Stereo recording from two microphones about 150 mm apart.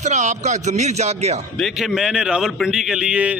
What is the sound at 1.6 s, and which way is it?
A man's voice, centre (ahead or behind).